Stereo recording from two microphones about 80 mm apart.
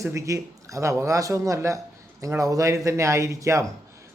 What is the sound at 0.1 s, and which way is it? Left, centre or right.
Speech, right.